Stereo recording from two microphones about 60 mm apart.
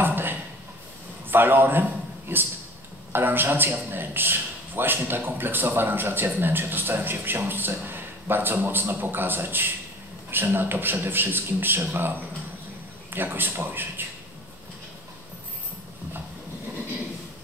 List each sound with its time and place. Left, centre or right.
0.0 s a sound: right
1.3 s a man's voice: right
13.1 s a man's voice: right